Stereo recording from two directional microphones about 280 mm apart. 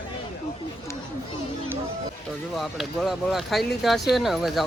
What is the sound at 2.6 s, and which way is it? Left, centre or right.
Speech, centre.